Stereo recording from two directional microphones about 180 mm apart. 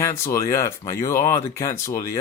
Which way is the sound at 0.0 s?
15° left (ahead or behind).